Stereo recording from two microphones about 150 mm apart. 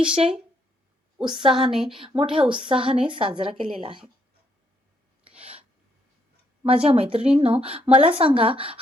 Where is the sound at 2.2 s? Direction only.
35° right (ahead or behind).